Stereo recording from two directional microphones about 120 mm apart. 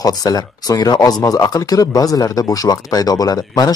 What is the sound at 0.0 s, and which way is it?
Speech, 30° left (ahead or behind).